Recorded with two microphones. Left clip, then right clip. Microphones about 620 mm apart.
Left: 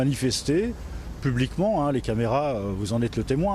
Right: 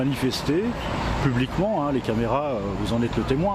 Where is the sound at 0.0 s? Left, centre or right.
Left.